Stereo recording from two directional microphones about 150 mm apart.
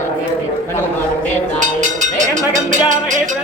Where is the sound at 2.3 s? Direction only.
60° right (ahead or behind).